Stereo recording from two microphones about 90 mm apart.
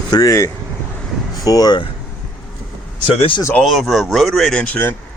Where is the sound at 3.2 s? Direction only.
70° left (ahead or behind).